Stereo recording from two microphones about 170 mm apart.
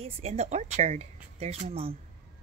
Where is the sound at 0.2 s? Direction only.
40° right (ahead or behind).